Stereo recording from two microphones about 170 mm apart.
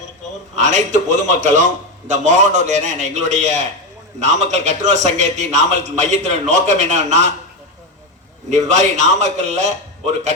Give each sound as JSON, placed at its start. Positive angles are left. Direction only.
{"t": 0.5, "sound": "a man's voice", "side_deg": -45}
{"t": 8.4, "sound": "a man's voice", "side_deg": -45}